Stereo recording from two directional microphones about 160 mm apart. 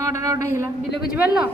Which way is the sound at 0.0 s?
20° right (ahead or behind).